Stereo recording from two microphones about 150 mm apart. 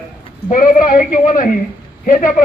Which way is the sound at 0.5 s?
65° left (ahead or behind).